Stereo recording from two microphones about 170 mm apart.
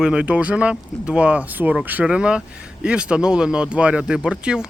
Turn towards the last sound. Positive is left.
turn(degrees=-5)  # may be behind; listen again after turning